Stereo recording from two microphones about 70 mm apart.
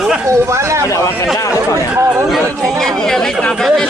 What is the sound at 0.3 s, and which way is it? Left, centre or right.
Speech, right.